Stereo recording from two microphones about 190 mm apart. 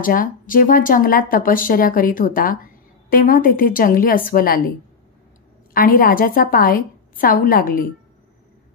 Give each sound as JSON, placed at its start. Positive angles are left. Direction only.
{"t": 0.0, "sound": "speech", "side_deg": 45}